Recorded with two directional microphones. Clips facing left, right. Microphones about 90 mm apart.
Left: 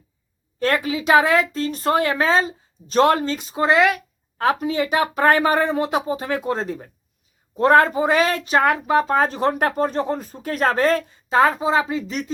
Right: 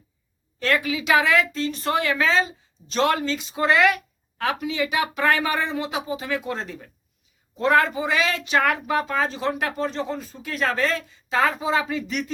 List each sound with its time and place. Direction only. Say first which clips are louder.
0.6 s speech: left 3 dB; 35° left (ahead or behind)
3.5 s speech: left 2 dB; 30° left (ahead or behind)
4.6 s speech: left 4 dB; 40° left (ahead or behind)
7.5 s speech: left 5 dB; 45° left (ahead or behind)
8.5 s speech: left 4 dB; 30° left (ahead or behind)
9.1 s speech: left 5 dB; 55° left (ahead or behind); by 12.2 s 30° left (ahead or behind)